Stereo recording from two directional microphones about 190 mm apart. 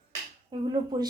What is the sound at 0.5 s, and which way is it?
Speech, 25° right (ahead or behind).